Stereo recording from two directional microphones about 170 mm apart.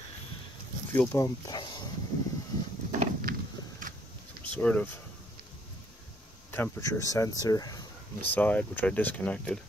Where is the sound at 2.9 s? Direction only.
50° right (ahead or behind).